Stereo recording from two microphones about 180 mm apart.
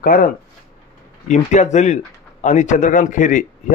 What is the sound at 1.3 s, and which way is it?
A man's voice, 40° left (ahead or behind).